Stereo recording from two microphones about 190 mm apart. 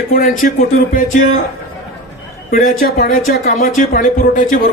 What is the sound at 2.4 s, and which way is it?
Speech, 45° left (ahead or behind).